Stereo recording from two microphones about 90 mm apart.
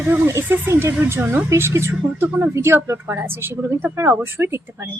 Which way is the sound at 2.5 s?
30° right (ahead or behind).